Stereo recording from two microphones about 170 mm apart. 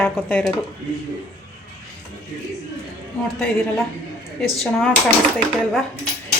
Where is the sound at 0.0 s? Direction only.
10° left (ahead or behind).